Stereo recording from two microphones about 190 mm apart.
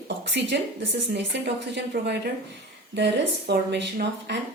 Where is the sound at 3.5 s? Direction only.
60° right (ahead or behind).